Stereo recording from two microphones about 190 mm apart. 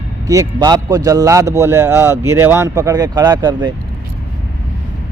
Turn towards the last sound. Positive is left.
turn(degrees=-20)  # may be behind; listen again after turning